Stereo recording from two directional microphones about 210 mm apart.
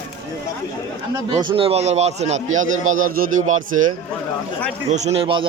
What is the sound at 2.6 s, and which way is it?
Speech, 70° right (ahead or behind).